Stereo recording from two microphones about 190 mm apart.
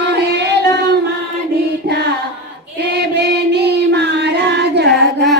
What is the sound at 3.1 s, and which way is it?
Music, 60° right (ahead or behind).